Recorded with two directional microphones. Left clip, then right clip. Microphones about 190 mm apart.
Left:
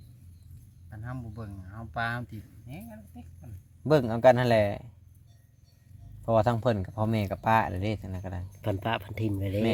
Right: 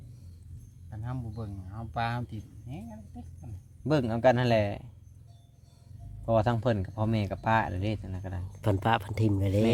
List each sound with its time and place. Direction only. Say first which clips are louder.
0.9 s speech: even; 10° left (ahead or behind)
3.8 s speech: left 4 dB; 40° left (ahead or behind)
6.2 s speech: left 2 dB; 40° left (ahead or behind)
8.6 s speech: right 3 dB; 10° right (ahead or behind)